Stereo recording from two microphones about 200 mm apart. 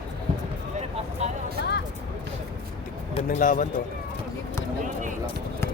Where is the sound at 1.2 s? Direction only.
35° right (ahead or behind).